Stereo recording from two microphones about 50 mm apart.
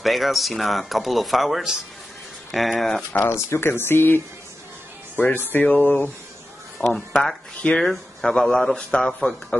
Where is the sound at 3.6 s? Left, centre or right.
Left.